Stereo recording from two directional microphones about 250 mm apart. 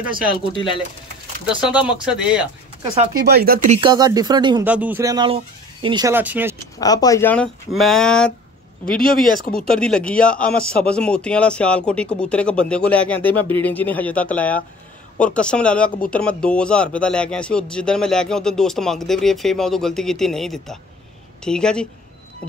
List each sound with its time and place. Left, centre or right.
0.6 s speech: centre
1.4 s speech: centre
2.8 s speech: centre
3.3 s speech: right; by 4.6 s centre
4.6 s speech: centre
6.8 s speech: centre
9.5 s speech: centre